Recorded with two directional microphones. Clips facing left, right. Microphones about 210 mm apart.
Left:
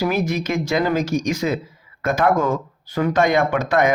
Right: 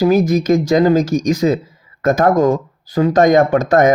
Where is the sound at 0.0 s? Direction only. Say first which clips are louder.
Right 8 dB; 40° right (ahead or behind).